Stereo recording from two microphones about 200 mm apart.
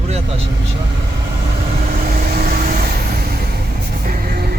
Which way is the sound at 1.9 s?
45° right (ahead or behind).